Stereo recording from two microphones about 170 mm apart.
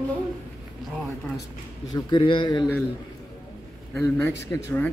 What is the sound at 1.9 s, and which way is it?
Speech, 30° left (ahead or behind).